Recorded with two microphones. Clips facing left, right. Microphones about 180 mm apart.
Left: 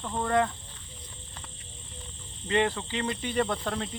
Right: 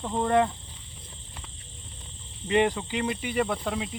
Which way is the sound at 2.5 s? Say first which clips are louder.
Right 3 dB; 15° right (ahead or behind).